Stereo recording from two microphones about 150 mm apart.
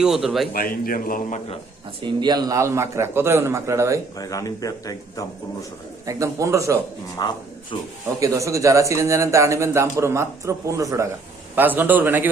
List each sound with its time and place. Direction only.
0.0 s a man's voice: 5° right (ahead or behind)
0.5 s speech: 75° left (ahead or behind)
2.0 s speech: 30° right (ahead or behind)
4.2 s speech: 25° left (ahead or behind)
6.1 s speech: 20° right (ahead or behind)
7.2 s speech: 30° left (ahead or behind)
8.2 s a man's voice: 20° right (ahead or behind)